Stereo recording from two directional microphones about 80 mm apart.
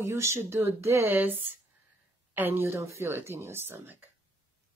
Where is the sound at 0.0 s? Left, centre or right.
Right.